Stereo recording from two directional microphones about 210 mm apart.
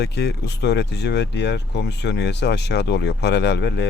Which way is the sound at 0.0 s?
50° left (ahead or behind).